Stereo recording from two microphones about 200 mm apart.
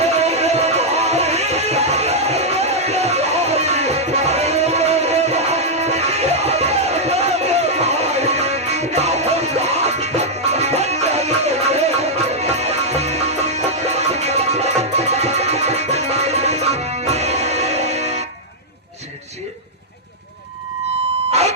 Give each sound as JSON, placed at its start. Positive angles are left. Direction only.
{"t": 0.0, "sound": "music", "side_deg": -30}